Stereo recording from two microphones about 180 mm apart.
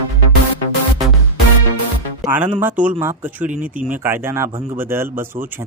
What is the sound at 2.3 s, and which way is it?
Speech, 10° right (ahead or behind).